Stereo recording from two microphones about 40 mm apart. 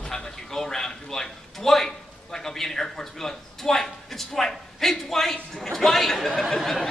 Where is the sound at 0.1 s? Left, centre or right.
Centre.